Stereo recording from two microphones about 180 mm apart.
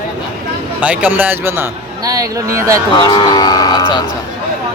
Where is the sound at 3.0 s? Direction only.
25° left (ahead or behind).